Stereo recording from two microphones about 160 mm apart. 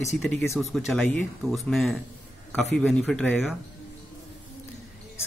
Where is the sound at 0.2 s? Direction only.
Centre (ahead or behind).